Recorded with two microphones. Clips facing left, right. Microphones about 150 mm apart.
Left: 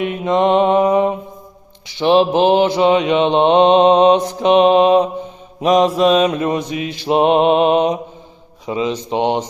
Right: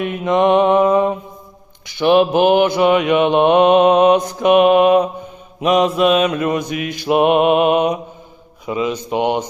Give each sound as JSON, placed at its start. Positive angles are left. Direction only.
{"t": 0.0, "sound": "mantra", "side_deg": 25}